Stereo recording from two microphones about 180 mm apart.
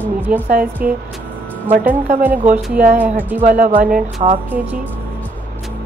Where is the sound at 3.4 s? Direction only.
45° right (ahead or behind).